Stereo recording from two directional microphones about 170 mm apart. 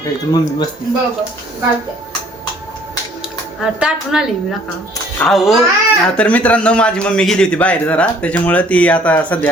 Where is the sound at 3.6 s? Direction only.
5° right (ahead or behind).